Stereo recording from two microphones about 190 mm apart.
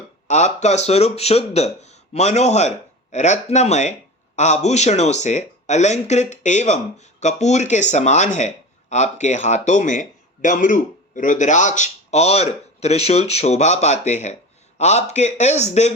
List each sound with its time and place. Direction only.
0.3 s speech: 40° left (ahead or behind)